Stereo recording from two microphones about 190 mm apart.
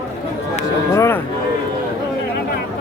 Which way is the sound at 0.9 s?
15° left (ahead or behind).